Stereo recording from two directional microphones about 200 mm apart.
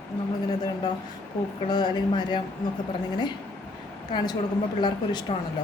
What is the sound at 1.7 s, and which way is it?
Speech, 20° left (ahead or behind).